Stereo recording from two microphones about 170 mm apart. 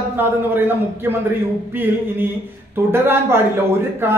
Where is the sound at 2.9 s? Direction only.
15° right (ahead or behind).